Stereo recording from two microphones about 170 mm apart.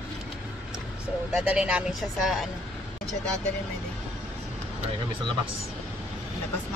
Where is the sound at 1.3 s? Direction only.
5° right (ahead or behind).